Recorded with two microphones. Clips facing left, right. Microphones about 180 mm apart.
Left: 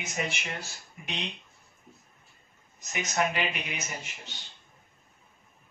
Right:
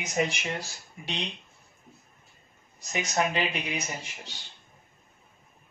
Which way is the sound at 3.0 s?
30° right (ahead or behind).